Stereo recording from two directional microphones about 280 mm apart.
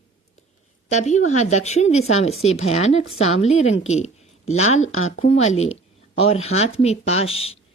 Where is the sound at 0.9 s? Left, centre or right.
Left.